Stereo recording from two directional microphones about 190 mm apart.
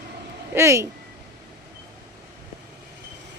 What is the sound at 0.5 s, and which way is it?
Speech, 15° right (ahead or behind).